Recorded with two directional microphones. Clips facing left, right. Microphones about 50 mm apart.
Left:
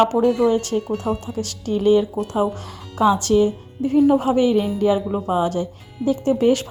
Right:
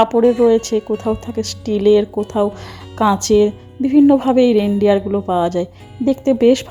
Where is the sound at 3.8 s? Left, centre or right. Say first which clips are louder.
Right 5 dB; right.